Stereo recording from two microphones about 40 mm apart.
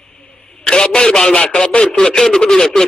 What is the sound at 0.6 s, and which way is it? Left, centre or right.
A man's voice, centre.